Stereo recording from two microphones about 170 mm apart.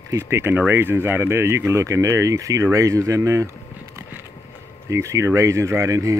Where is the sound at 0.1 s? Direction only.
15° right (ahead or behind).